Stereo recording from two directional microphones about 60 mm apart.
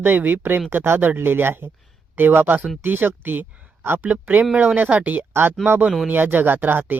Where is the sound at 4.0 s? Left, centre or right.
Right.